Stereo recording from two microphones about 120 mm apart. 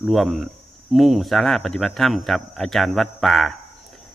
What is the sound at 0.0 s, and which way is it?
Speech, centre (ahead or behind).